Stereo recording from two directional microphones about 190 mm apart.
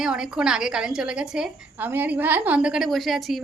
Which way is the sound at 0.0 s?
5° right (ahead or behind).